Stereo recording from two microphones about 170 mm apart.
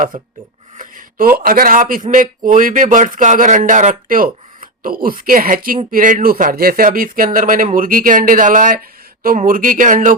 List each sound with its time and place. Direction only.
0.1 s speech: 50° right (ahead or behind)